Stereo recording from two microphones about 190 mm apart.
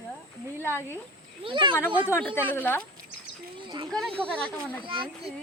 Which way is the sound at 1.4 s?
25° right (ahead or behind).